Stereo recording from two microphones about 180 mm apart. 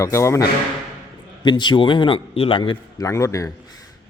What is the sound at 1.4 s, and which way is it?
A man's voice, 25° left (ahead or behind).